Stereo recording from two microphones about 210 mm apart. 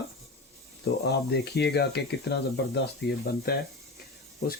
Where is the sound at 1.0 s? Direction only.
55° left (ahead or behind).